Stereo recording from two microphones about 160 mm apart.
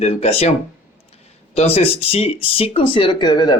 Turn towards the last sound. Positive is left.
turn(degrees=25)  # may be behind; listen again after turning